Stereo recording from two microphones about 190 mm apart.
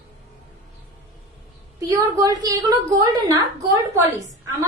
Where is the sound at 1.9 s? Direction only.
20° right (ahead or behind).